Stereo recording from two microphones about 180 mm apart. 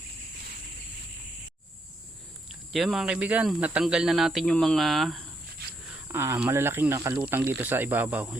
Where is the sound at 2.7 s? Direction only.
Centre (ahead or behind).